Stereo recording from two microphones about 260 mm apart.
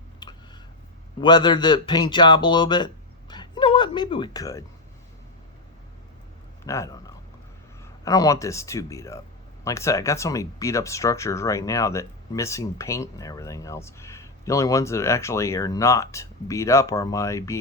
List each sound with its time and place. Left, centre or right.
1.2 s speech: centre
6.7 s speech: centre
8.0 s speech: centre